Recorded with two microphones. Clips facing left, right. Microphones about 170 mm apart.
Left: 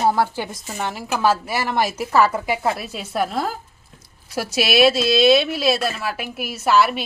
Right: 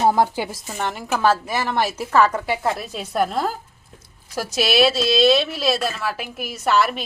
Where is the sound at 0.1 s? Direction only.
15° right (ahead or behind).